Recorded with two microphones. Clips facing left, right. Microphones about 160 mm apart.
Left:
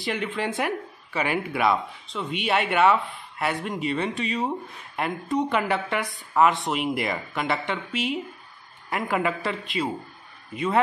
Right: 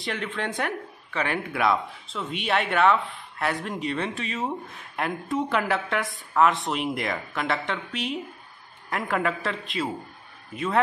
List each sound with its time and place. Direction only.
0.0 s a man's voice: 5° left (ahead or behind)